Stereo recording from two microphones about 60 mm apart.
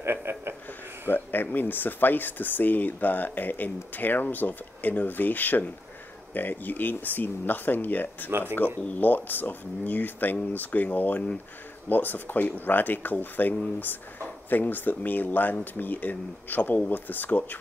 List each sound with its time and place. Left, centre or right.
0.0 s a sound: right
1.0 s speech: left
8.3 s speech: right
8.8 s speech: left